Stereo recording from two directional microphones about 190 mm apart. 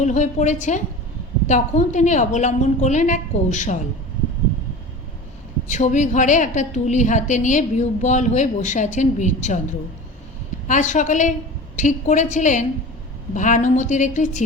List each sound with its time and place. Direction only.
0.0 s a woman's voice: 40° left (ahead or behind)
5.6 s a woman's voice: 40° left (ahead or behind)
10.7 s a woman's voice: 40° left (ahead or behind)